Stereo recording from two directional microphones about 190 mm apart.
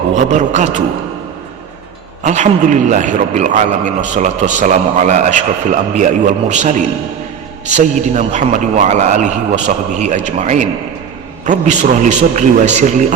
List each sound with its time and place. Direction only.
0.1 s a man's voice: 40° right (ahead or behind)
2.2 s a man's voice: 40° right (ahead or behind)